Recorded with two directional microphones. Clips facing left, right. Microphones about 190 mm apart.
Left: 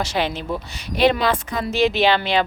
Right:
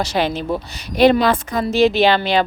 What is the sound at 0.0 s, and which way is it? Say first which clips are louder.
A woman's voice: right 4 dB; 40° right (ahead or behind).